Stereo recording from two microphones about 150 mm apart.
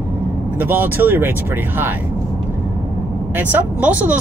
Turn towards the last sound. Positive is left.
turn(degrees=-10)  # may be behind; listen again after turning